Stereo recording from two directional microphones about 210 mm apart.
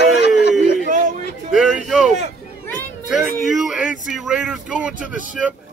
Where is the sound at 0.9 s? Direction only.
35° right (ahead or behind).